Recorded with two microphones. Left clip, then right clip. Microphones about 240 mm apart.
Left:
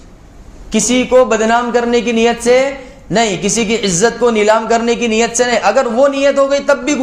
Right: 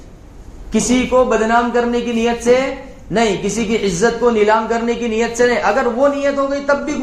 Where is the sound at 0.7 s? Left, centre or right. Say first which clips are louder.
Left 3 dB; left.